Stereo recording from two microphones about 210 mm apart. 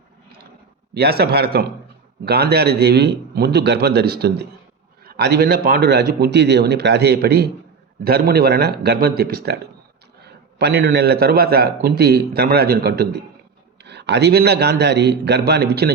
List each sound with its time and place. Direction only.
0.9 s a man's voice: 50° right (ahead or behind)